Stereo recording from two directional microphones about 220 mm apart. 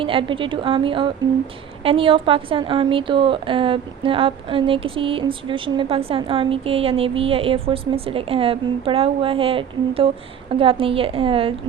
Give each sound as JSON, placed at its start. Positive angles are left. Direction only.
{"t": 0.0, "sound": "a woman's voice", "side_deg": -25}